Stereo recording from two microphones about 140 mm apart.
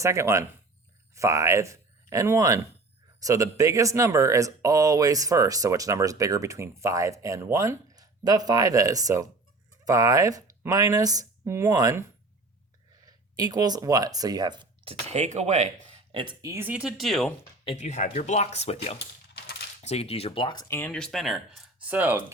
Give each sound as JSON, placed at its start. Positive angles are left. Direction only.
{"t": 0.0, "sound": "speech", "side_deg": -20}
{"t": 13.1, "sound": "speech", "side_deg": -30}
{"t": 15.0, "sound": "speech", "side_deg": -55}
{"t": 16.1, "sound": "speech", "side_deg": -30}
{"t": 17.0, "sound": "speech", "side_deg": 0}
{"t": 17.7, "sound": "speech", "side_deg": 55}
{"t": 20.7, "sound": "speech", "side_deg": 20}
{"t": 20.9, "sound": "speech", "side_deg": 5}